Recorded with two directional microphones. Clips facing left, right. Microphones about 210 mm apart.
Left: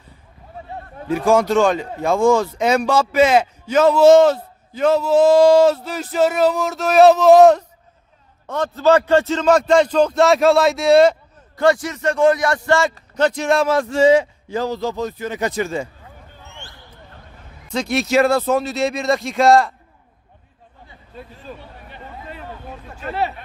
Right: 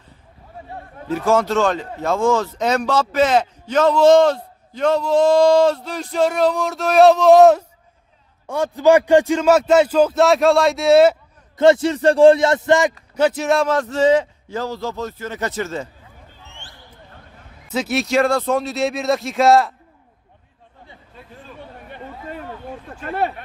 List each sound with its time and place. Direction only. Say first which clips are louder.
1.0 s speech: left 2 dB; 15° left (ahead or behind)
8.4 s a man's voice: right 1 dB; 10° right (ahead or behind)
11.5 s a man's voice: right 4 dB; 25° right (ahead or behind)
13.1 s speech: even; 5° right (ahead or behind); by 15.9 s 15° left (ahead or behind)
17.7 s speech: left 1 dB; 5° right (ahead or behind)
21.8 s a sound: right 2 dB; 50° right (ahead or behind)